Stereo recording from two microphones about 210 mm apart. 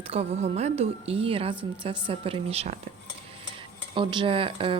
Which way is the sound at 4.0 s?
20° right (ahead or behind).